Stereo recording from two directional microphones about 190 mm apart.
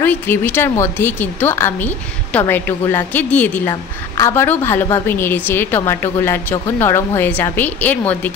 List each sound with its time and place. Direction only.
0.0 s a woman's voice: 10° left (ahead or behind)